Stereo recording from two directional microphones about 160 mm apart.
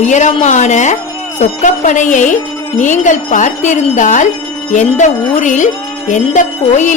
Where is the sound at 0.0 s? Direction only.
45° left (ahead or behind).